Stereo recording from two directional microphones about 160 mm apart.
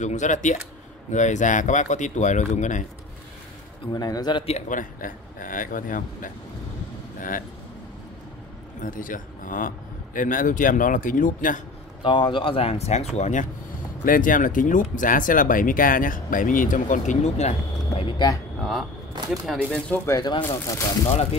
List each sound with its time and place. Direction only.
0.0 s speech: 50° left (ahead or behind)
3.8 s speech: 25° left (ahead or behind)
4.6 s speech: 55° left (ahead or behind)
8.8 s speech: 55° left (ahead or behind)
12.0 s speech: 30° left (ahead or behind)
18.0 s a sound: 25° left (ahead or behind)
18.6 s speech: centre (ahead or behind)
20.1 s speech: 25° left (ahead or behind)